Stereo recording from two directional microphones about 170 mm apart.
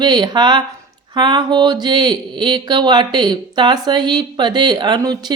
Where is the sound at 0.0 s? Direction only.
25° right (ahead or behind).